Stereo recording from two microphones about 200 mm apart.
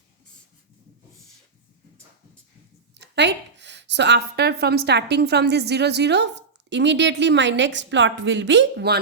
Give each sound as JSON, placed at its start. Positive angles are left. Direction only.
{"t": 2.9, "sound": "a woman's voice", "side_deg": -60}